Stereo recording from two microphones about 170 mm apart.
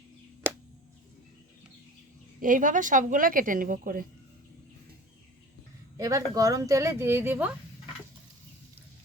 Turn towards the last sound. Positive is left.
turn(degrees=-10)  # may be behind; listen again after turning